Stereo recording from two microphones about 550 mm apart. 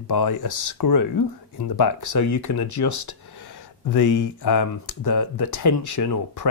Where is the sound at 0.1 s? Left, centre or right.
Left.